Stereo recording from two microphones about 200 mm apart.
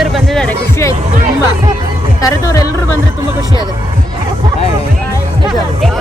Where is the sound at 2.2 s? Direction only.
15° left (ahead or behind).